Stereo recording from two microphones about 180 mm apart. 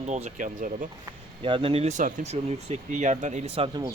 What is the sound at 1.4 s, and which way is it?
Speech, 30° right (ahead or behind).